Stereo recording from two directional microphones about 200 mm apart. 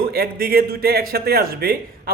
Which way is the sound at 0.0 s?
50° right (ahead or behind).